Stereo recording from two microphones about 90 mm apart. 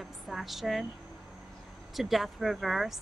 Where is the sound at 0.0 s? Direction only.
Centre (ahead or behind).